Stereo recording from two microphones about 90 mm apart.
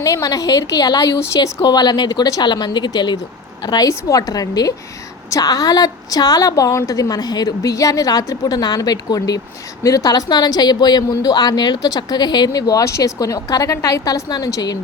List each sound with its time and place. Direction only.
0.0 s a woman's voice: 35° left (ahead or behind)
12.8 s a woman's voice: 35° left (ahead or behind)